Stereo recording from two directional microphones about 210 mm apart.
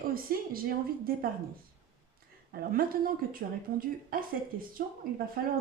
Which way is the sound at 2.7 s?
45° right (ahead or behind).